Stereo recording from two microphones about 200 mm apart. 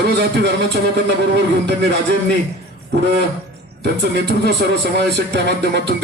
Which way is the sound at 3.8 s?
55° right (ahead or behind).